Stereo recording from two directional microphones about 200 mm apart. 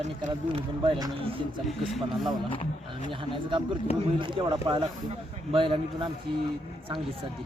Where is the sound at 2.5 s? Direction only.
30° left (ahead or behind).